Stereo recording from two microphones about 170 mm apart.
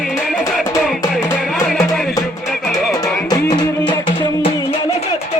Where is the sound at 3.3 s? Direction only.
25° left (ahead or behind).